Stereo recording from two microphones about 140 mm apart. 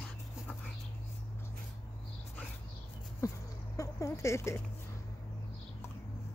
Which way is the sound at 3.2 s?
25° left (ahead or behind).